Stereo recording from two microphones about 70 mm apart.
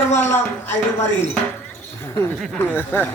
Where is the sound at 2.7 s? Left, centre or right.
Left.